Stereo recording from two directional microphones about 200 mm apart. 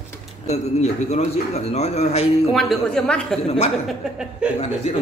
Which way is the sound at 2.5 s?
Centre (ahead or behind).